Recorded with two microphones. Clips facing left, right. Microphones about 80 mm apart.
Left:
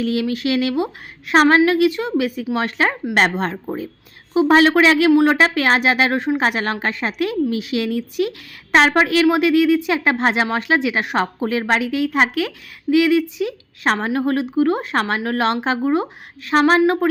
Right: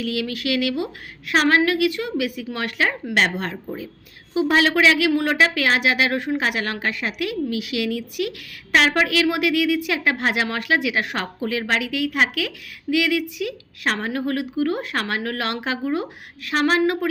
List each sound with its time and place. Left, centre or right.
0.0 s a woman's voice: left